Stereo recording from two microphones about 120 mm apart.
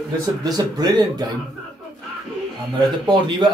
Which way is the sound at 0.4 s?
35° right (ahead or behind).